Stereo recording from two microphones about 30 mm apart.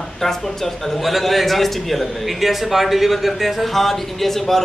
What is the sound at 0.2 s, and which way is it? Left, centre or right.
A man's voice, centre.